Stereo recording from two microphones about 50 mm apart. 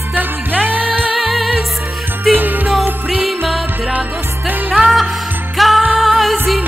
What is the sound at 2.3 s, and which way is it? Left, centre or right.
Music, right.